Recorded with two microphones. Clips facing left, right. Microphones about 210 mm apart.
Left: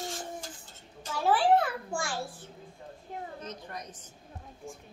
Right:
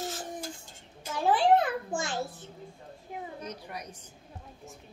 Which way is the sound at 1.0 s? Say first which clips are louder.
Right 1 dB; 15° right (ahead or behind).